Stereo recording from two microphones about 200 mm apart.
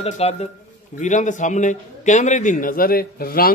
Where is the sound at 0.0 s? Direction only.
30° left (ahead or behind).